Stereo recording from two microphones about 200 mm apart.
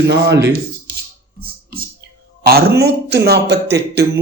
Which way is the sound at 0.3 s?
60° right (ahead or behind).